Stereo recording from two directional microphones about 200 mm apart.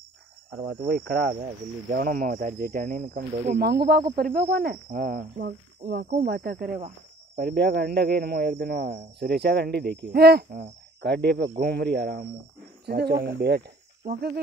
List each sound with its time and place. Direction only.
0.7 s speech: 50° right (ahead or behind)
1.3 s speech: 40° right (ahead or behind); by 4.0 s 55° right (ahead or behind)
4.1 s speech: 45° right (ahead or behind)